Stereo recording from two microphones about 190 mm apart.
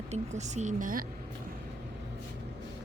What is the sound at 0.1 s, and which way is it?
Speech, 35° right (ahead or behind).